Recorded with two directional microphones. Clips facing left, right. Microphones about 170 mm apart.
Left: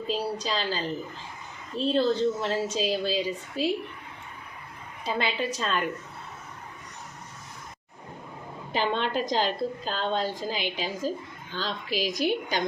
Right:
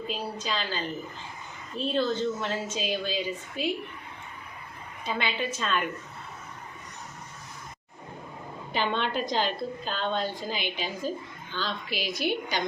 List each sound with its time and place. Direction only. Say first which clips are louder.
0.1 s a woman's voice: left 5 dB; 35° left (ahead or behind)
5.0 s a woman's voice: left 2 dB; 35° left (ahead or behind)
8.7 s a woman's voice: left 2 dB; 35° left (ahead or behind)